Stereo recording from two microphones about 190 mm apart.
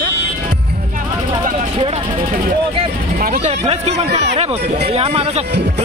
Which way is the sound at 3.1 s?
45° right (ahead or behind).